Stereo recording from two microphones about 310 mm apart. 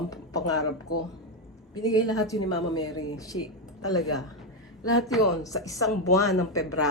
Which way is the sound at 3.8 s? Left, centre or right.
Left.